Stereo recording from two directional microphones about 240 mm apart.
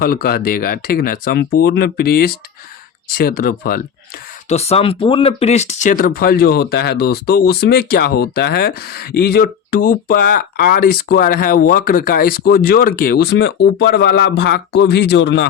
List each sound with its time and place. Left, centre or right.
0.0 s speech: left
4.4 s speech: left